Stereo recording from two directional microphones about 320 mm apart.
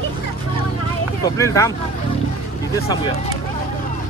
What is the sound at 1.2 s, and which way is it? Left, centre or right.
Speech, centre.